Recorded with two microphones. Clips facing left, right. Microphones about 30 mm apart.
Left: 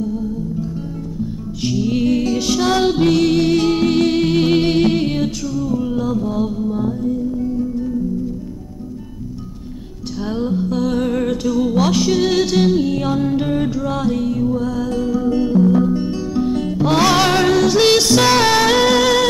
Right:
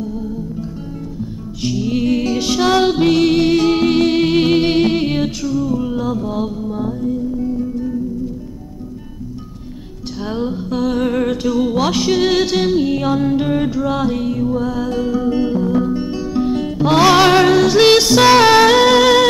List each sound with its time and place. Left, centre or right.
0.0 s music: centre
10.2 s music: centre